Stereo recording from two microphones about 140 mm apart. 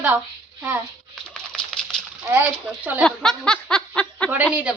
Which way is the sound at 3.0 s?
5° left (ahead or behind).